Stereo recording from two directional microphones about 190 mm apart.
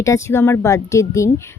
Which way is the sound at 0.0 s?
15° left (ahead or behind).